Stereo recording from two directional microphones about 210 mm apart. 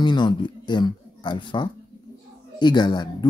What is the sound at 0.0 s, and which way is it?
A man's voice, 20° left (ahead or behind).